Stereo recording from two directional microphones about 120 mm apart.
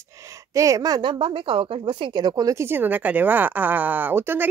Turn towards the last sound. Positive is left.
turn(degrees=-20)  # may be behind; listen again after turning